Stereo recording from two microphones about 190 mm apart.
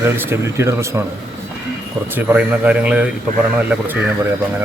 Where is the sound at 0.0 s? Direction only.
15° right (ahead or behind).